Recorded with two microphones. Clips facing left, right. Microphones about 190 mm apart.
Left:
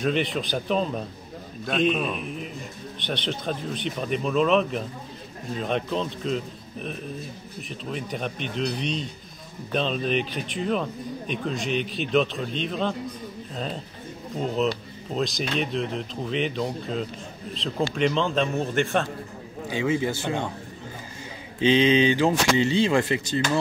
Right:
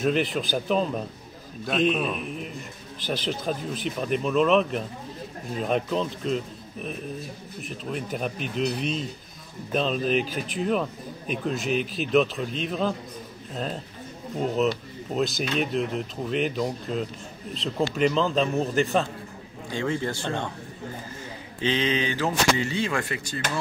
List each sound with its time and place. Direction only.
0.0 s a man's voice: centre (ahead or behind)
14.4 s a man's voice: centre (ahead or behind)
21.5 s speech: 15° left (ahead or behind)